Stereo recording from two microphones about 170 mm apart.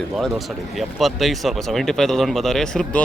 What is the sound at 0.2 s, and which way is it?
Speech, centre (ahead or behind).